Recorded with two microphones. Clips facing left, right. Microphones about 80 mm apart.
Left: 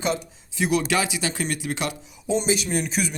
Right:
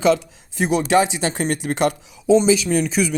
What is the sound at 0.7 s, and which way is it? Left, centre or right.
Speech, right.